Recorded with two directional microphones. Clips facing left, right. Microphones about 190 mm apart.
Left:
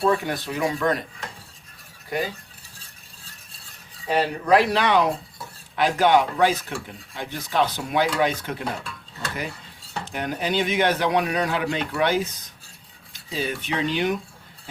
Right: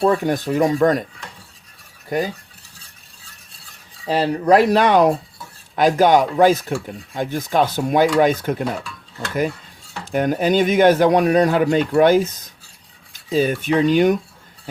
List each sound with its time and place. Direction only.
0.0 s speech: 45° right (ahead or behind)
4.1 s speech: 35° right (ahead or behind)
10.1 s speech: 50° right (ahead or behind)
13.3 s speech: 50° right (ahead or behind)